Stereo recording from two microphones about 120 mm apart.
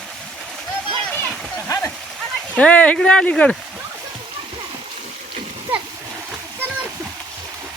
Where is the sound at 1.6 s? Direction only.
20° left (ahead or behind).